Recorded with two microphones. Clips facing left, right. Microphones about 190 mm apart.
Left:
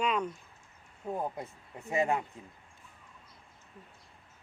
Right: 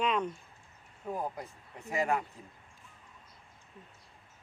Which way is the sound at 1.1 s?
25° left (ahead or behind).